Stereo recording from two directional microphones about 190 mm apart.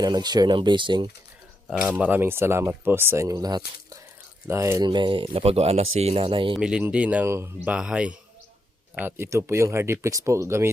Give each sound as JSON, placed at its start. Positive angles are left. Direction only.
{"t": 0.0, "sound": "speech", "side_deg": -20}
{"t": 1.6, "sound": "speech", "side_deg": -5}
{"t": 6.5, "sound": "speech", "side_deg": -5}